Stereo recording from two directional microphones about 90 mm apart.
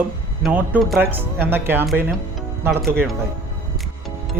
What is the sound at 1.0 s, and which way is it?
Speech, 25° right (ahead or behind).